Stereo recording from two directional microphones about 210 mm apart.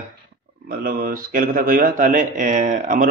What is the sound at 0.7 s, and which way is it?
Speech, 45° right (ahead or behind).